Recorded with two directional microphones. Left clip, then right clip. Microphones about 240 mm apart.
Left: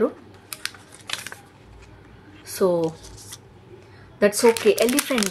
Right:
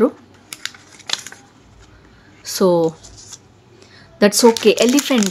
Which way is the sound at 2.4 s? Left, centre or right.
Right.